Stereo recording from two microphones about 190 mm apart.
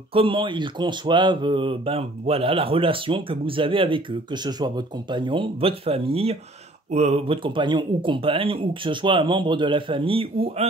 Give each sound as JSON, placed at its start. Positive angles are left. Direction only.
{"t": 0.1, "sound": "speech", "side_deg": -25}